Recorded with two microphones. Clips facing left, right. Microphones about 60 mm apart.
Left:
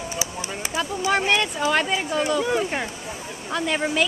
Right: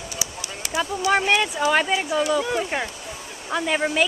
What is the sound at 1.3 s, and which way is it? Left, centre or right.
Speech, centre.